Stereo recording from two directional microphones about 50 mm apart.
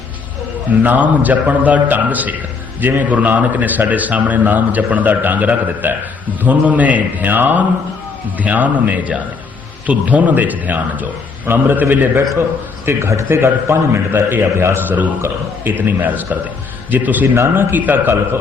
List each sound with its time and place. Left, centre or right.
0.8 s a man's voice: right
12.8 s a man's voice: right
15.2 s a man's voice: right
16.0 s a man's voice: right
17.3 s a man's voice: right
17.7 s a man's voice: right